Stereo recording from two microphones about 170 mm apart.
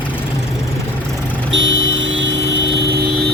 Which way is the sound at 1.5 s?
90° right.